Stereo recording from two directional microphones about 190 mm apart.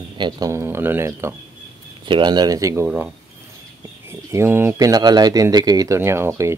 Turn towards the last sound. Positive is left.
turn(degrees=-15)  # may be behind; listen again after turning